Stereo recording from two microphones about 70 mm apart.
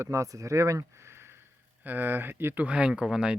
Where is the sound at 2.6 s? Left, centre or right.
Centre.